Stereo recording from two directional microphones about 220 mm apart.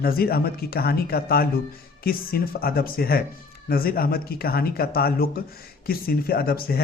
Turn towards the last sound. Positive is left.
turn(degrees=45)  # may be behind; listen again after turning